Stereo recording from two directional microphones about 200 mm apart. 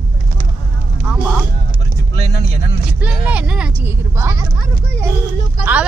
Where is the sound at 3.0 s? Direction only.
5° right (ahead or behind).